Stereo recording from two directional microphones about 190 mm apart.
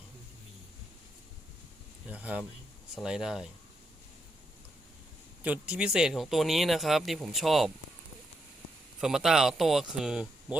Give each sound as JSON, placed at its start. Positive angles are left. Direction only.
{"t": 2.0, "sound": "speech", "side_deg": -10}
{"t": 5.4, "sound": "speech", "side_deg": -10}
{"t": 9.0, "sound": "speech", "side_deg": 0}